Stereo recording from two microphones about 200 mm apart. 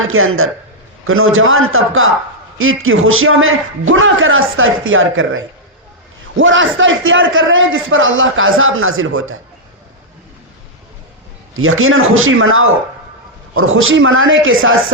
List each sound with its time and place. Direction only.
0.0 s a man's voice: 90° right
11.5 s a man's voice: 90° right